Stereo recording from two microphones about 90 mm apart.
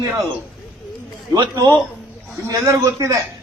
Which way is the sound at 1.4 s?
50° right (ahead or behind).